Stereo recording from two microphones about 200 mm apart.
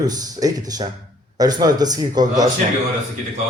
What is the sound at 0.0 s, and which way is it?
A man's voice, 20° right (ahead or behind).